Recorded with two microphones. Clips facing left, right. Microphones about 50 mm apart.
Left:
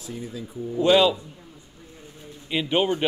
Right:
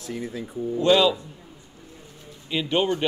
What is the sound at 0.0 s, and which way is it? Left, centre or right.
Speech, right.